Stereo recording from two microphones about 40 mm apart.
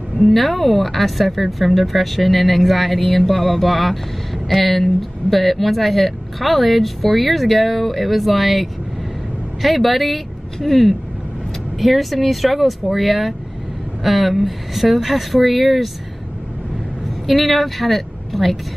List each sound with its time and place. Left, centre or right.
0.2 s speech: centre
17.3 s a woman's voice: centre